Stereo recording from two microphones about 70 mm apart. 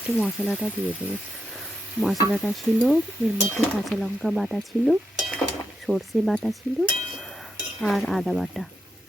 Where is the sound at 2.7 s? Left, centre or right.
Centre.